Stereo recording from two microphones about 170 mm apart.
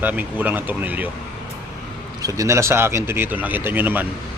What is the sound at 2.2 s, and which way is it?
Speech, 20° right (ahead or behind).